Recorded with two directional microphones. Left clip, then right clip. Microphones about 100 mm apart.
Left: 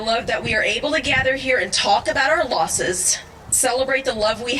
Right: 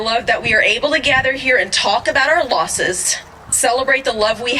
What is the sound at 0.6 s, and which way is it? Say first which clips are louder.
A woman's voice: right 6 dB; 15° right (ahead or behind).